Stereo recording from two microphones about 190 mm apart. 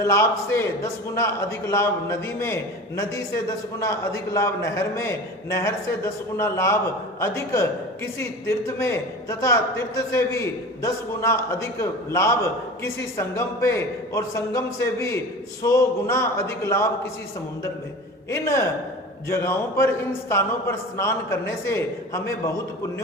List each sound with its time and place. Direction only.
0.0 s a man's voice: 15° left (ahead or behind)
18.3 s a man's voice: 15° left (ahead or behind)